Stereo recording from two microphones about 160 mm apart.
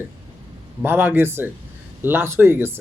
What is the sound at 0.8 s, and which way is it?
A man's voice, 10° right (ahead or behind).